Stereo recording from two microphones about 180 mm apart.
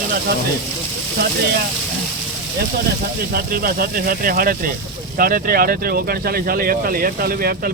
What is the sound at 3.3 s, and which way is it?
Speech, 55° right (ahead or behind).